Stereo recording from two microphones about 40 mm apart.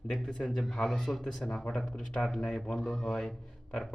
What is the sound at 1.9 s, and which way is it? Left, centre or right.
Speech, left.